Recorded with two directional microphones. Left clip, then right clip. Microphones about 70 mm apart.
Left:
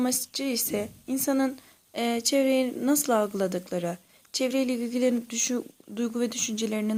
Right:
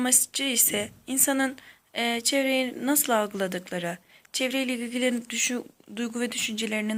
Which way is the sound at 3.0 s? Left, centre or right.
Left.